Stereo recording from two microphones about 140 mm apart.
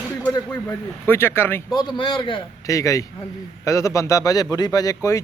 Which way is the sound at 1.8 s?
35° left (ahead or behind).